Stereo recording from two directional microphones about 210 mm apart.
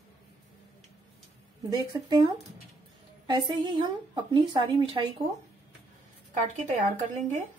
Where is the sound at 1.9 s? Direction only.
20° right (ahead or behind).